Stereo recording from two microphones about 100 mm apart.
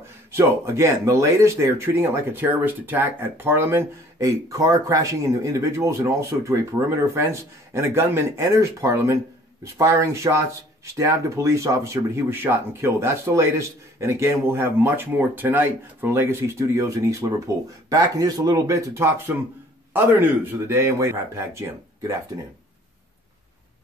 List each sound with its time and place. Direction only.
0.0 s speech: 30° right (ahead or behind)